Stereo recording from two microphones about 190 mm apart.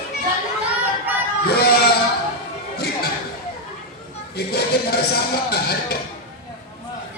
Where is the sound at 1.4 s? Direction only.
55° left (ahead or behind).